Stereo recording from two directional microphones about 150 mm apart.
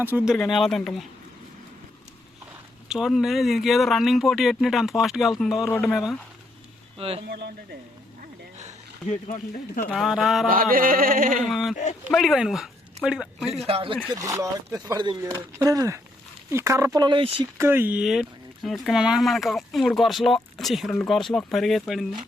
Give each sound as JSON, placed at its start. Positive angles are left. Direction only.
{"t": 0.0, "sound": "speech", "side_deg": -10}
{"t": 0.3, "sound": "speech", "side_deg": 0}
{"t": 2.9, "sound": "speech", "side_deg": -5}
{"t": 7.0, "sound": "speech", "side_deg": -40}
{"t": 7.3, "sound": "speech", "side_deg": -90}
{"t": 9.0, "sound": "speech", "side_deg": 55}
{"t": 9.9, "sound": "speech", "side_deg": 0}
{"t": 10.5, "sound": "speech", "side_deg": -70}
{"t": 11.4, "sound": "speech", "side_deg": 0}
{"t": 13.7, "sound": "speech", "side_deg": -35}
{"t": 14.1, "sound": "speech", "side_deg": -20}
{"t": 17.6, "sound": "speech", "side_deg": -15}